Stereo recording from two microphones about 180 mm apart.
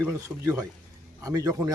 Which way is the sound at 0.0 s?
15° right (ahead or behind).